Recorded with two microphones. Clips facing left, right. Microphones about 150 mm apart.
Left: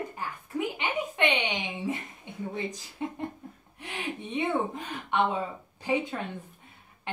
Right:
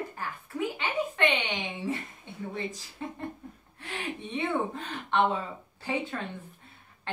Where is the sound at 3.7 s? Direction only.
20° left (ahead or behind).